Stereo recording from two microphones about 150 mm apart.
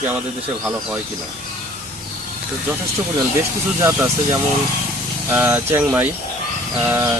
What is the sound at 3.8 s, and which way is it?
Speech, 20° right (ahead or behind).